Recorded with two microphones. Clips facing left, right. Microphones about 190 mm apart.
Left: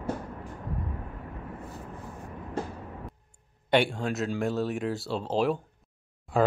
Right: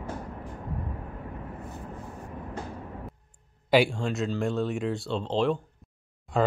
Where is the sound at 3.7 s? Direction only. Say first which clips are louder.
Right 2 dB; centre (ahead or behind).